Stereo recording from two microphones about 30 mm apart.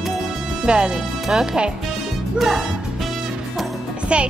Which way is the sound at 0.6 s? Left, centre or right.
Right.